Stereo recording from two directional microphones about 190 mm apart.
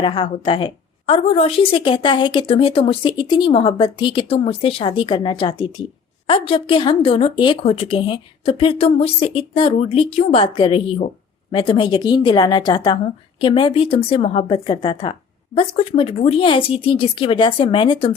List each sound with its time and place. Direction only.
0.0 s speech: 25° left (ahead or behind)